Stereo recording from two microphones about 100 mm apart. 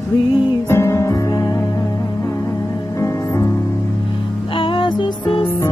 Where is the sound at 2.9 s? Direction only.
30° left (ahead or behind).